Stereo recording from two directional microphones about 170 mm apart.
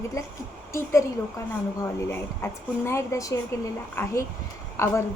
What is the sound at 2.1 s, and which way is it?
A woman's voice, 15° left (ahead or behind).